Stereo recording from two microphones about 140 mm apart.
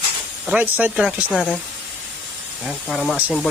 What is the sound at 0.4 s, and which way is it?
Speech, 10° right (ahead or behind).